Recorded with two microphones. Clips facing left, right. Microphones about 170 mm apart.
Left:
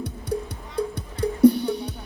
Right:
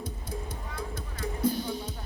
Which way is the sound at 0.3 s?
70° left (ahead or behind).